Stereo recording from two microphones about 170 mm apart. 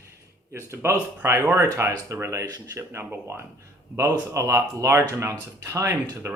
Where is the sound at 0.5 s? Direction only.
15° right (ahead or behind).